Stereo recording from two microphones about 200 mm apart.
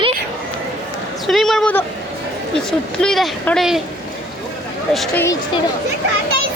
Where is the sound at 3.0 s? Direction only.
Centre (ahead or behind).